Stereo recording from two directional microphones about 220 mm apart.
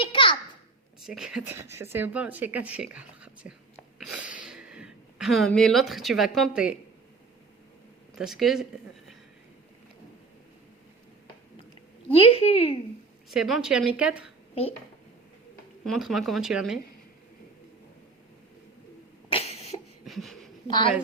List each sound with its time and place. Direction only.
0.0 s a sound: 25° left (ahead or behind)
1.0 s speech: centre (ahead or behind)
4.0 s a sound: 5° right (ahead or behind)
8.2 s speech: centre (ahead or behind)
12.1 s a woman's voice: 25° left (ahead or behind)
13.3 s speech: 5° right (ahead or behind)
15.8 s speech: centre (ahead or behind)
19.3 s cough: 25° left (ahead or behind)
20.1 s a sound: centre (ahead or behind)
20.7 s a woman's voice: 20° left (ahead or behind)